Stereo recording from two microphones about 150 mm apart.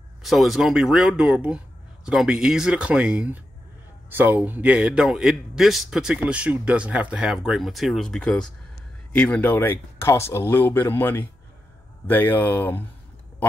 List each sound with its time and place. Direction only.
0.2 s speech: centre (ahead or behind)